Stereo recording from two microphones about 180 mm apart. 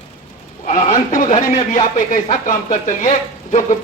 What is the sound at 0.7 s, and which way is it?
Speech, 45° left (ahead or behind).